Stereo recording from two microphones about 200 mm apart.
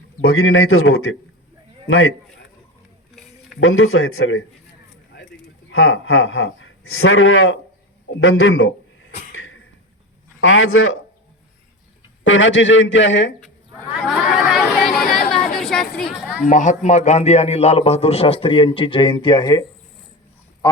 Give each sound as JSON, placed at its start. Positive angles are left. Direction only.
{"t": 0.2, "sound": "speech", "side_deg": 90}
{"t": 3.6, "sound": "speech", "side_deg": 90}
{"t": 5.7, "sound": "speech", "side_deg": 90}
{"t": 9.3, "sound": "a sound", "side_deg": 80}
{"t": 10.4, "sound": "speech", "side_deg": 90}
{"t": 12.2, "sound": "a man's voice", "side_deg": 70}
{"t": 13.4, "sound": "chatter", "side_deg": 0}
{"t": 15.5, "sound": "a sound", "side_deg": 0}
{"t": 16.5, "sound": "a man's voice", "side_deg": 40}